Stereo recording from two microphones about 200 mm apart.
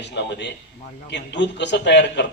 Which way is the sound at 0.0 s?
60° left (ahead or behind).